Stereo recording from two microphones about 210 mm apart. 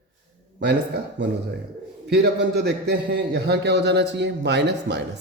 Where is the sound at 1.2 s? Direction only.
55° right (ahead or behind).